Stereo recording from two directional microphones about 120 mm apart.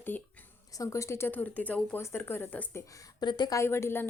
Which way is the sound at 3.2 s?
40° left (ahead or behind).